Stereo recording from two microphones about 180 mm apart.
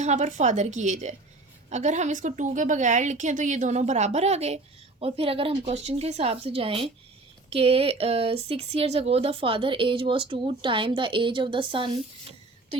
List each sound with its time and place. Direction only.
0.0 s a woman's voice: 40° right (ahead or behind)